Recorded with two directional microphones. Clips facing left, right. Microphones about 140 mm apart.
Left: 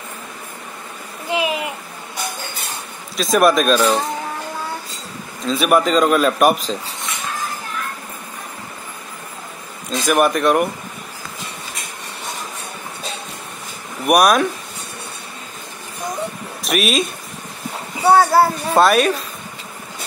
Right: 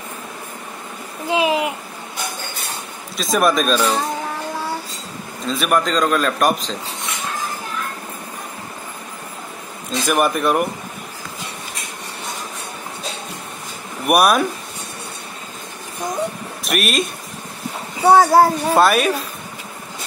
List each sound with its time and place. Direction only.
1.3 s a sound: 25° right (ahead or behind)
3.2 s a man's voice: centre (ahead or behind)
5.5 s a man's voice: 5° left (ahead or behind)
9.9 s a man's voice: centre (ahead or behind)
14.0 s a man's voice: 5° right (ahead or behind)
16.6 s speech: centre (ahead or behind)
18.1 s a child's voice: 10° right (ahead or behind)
18.8 s a man's voice: centre (ahead or behind)